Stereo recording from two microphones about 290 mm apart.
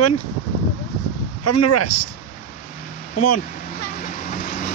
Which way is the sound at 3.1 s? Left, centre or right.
Left.